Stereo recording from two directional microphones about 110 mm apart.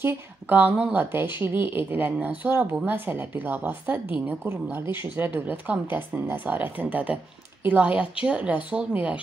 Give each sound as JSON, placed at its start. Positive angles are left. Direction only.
{"t": 0.0, "sound": "a woman's voice", "side_deg": -15}